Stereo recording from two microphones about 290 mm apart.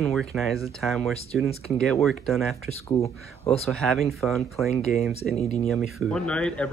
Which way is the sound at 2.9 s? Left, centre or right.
Centre.